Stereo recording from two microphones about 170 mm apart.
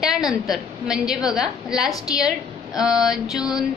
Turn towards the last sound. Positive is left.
turn(degrees=0)  # may be behind; listen again after turning